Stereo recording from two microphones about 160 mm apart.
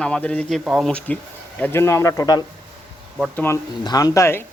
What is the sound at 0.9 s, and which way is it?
A man's voice, 10° left (ahead or behind).